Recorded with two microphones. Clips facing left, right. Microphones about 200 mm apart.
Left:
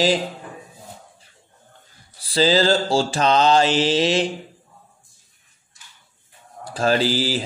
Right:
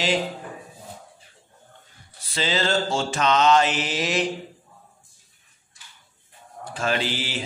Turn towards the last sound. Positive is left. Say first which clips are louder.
# left 7 dB
turn(degrees=35)  # may be behind; listen again after turning